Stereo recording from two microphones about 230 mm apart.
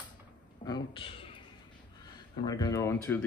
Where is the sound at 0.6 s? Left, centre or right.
Centre.